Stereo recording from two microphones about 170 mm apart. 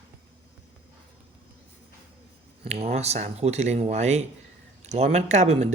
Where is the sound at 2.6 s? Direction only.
40° right (ahead or behind).